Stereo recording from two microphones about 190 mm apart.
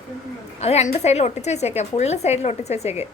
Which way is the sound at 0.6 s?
35° left (ahead or behind).